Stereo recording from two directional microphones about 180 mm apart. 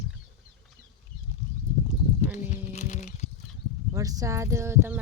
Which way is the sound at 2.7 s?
40° left (ahead or behind).